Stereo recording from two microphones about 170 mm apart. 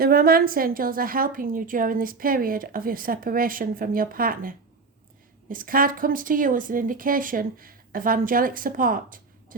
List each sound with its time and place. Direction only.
0.0 s a woman's voice: 60° right (ahead or behind)